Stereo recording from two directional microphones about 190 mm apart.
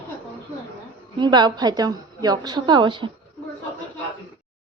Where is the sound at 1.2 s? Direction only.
25° right (ahead or behind).